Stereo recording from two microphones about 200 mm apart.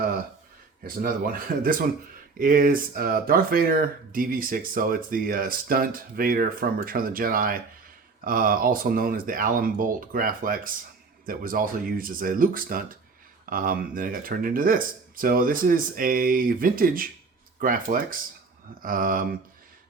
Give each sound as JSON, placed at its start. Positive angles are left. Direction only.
{"t": 0.9, "sound": "speech", "side_deg": -45}